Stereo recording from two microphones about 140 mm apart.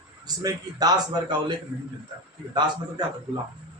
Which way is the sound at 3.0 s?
30° right (ahead or behind).